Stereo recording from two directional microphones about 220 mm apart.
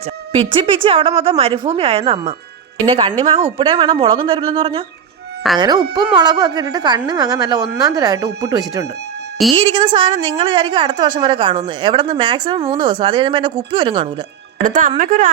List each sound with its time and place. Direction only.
0.3 s a woman's voice: 25° right (ahead or behind)
14.6 s speech: 40° right (ahead or behind)